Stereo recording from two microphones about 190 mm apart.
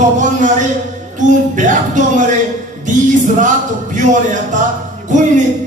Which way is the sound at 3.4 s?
40° right (ahead or behind).